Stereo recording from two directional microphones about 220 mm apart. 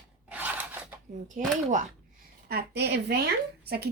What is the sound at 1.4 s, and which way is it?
Speech, 35° right (ahead or behind).